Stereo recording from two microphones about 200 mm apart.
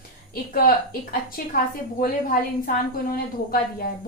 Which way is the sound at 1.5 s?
45° left (ahead or behind).